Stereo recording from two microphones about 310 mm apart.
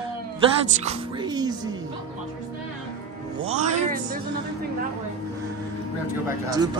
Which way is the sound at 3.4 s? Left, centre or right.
Right.